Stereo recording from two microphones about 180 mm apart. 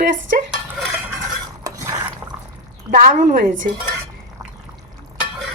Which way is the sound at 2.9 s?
40° right (ahead or behind).